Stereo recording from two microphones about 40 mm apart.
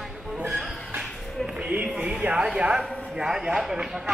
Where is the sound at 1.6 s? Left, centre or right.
Right.